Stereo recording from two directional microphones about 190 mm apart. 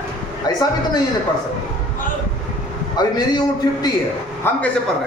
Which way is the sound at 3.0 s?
20° left (ahead or behind).